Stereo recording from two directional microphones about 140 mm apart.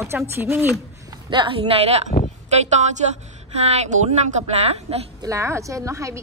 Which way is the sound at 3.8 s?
55° right (ahead or behind).